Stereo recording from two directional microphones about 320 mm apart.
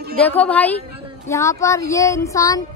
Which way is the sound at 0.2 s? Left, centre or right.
Centre.